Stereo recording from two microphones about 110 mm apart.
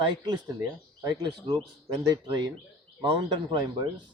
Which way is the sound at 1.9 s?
40° right (ahead or behind).